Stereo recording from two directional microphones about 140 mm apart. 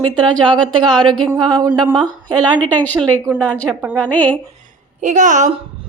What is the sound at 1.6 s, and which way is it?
Speech, 30° right (ahead or behind).